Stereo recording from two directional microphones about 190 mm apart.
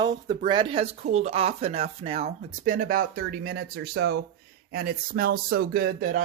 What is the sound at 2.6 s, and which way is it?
Speech, 45° right (ahead or behind).